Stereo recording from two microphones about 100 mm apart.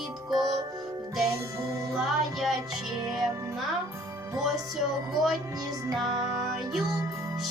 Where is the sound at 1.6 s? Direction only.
30° right (ahead or behind).